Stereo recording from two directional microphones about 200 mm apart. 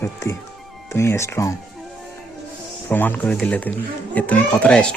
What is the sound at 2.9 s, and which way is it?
A child's voice, 10° left (ahead or behind).